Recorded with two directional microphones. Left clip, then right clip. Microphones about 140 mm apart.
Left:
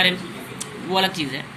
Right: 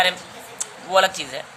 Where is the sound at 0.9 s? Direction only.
90° right.